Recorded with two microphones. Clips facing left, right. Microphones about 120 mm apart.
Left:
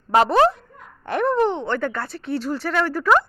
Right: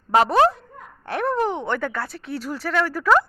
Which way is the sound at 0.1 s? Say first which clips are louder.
Left 1 dB; 5° right (ahead or behind).